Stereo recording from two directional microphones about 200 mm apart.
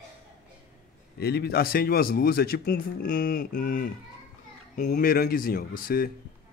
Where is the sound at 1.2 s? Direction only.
55° left (ahead or behind).